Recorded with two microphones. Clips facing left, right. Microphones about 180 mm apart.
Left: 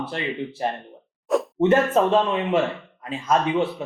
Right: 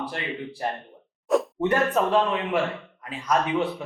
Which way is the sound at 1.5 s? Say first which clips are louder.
Left 5 dB; 25° left (ahead or behind).